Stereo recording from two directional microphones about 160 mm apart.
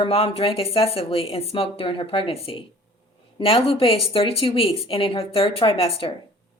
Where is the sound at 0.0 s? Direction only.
35° left (ahead or behind).